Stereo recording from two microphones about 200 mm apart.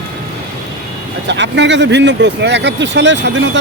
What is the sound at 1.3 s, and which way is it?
Speech, 65° right (ahead or behind).